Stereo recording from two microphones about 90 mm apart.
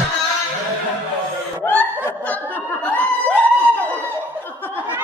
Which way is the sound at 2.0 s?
15° left (ahead or behind).